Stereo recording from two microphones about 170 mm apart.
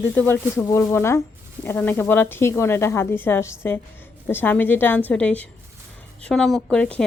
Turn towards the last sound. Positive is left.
turn(degrees=5)  # may be behind; listen again after turning